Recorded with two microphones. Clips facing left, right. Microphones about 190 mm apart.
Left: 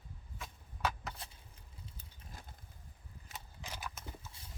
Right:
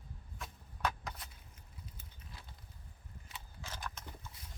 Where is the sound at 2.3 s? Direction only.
45° left (ahead or behind).